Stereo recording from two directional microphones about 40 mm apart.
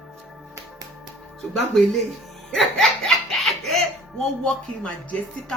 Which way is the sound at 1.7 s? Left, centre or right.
Centre.